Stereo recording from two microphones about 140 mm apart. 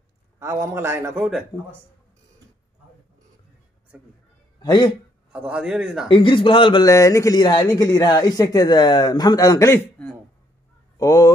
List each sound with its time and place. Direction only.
0.4 s a man's voice: 20° right (ahead or behind)
4.6 s a man's voice: 30° left (ahead or behind)
5.3 s a man's voice: 5° right (ahead or behind)
6.0 s a man's voice: 35° left (ahead or behind)
6.8 s speech: 25° left (ahead or behind)
10.0 s a sound: 5° left (ahead or behind)
11.0 s speech: 25° left (ahead or behind)